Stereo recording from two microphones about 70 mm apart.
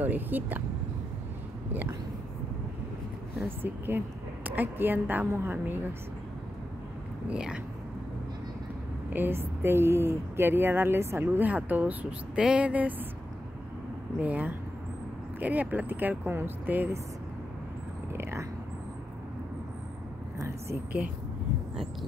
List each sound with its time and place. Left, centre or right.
0.0 s speech: right
1.7 s speech: right
3.4 s speech: right
7.2 s speech: centre
9.1 s speech: right
11.2 s speech: right
14.2 s speech: right
18.1 s vehicle: right
20.3 s a sound: right